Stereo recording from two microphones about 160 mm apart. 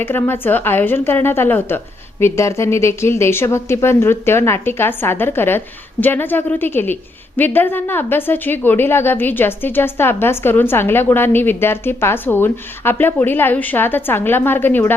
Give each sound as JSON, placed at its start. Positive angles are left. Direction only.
{"t": 0.0, "sound": "a woman's voice", "side_deg": 15}